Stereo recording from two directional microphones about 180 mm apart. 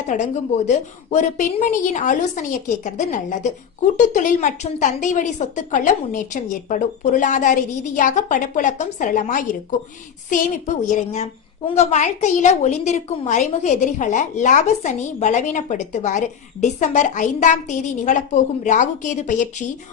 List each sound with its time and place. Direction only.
0.1 s a woman's voice: 40° left (ahead or behind)